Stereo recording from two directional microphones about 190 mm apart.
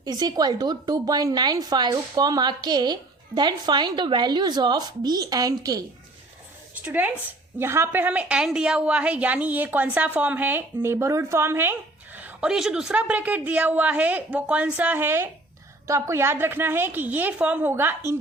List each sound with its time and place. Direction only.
0.0 s a woman's voice: 20° right (ahead or behind)
6.7 s a woman's voice: 10° right (ahead or behind)